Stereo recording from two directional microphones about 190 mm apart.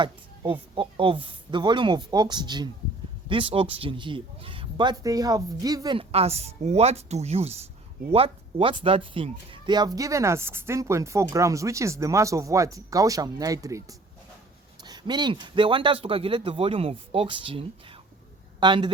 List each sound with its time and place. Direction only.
0.0 s a man's voice: 25° right (ahead or behind)